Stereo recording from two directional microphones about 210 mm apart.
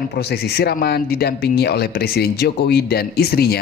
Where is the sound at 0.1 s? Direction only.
50° left (ahead or behind).